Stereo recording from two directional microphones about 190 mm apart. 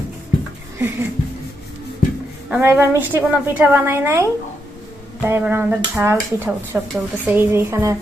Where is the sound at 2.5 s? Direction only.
10° right (ahead or behind).